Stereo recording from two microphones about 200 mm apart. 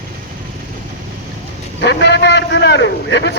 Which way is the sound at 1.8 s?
60° left (ahead or behind).